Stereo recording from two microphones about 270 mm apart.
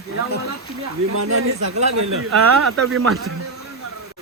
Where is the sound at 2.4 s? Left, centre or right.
Right.